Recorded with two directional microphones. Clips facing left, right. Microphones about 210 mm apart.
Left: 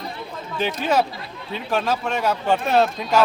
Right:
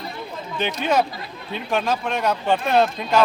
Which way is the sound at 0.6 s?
5° left (ahead or behind).